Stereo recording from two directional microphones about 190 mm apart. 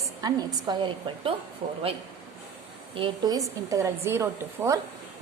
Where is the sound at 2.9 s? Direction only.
25° right (ahead or behind).